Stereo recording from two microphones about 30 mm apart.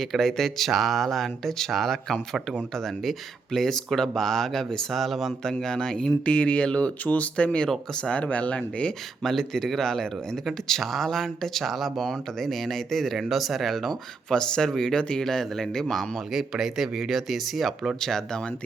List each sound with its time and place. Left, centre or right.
0.0 s speech: centre
0.7 s speech: centre
5.5 s speech: left
6.2 s speech: left
7.0 s speech: left
7.3 s speech: left
9.2 s speech: centre
11.6 s speech: centre
11.9 s speech: centre
13.3 s speech: centre
14.3 s speech: left
16.3 s speech: centre